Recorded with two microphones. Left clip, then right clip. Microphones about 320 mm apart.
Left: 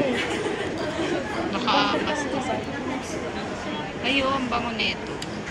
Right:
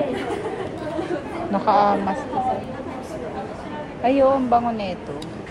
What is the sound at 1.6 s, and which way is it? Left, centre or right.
Speech, centre.